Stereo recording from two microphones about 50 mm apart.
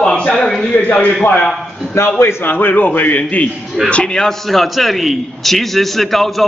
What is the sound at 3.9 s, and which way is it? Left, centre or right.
Speech, centre.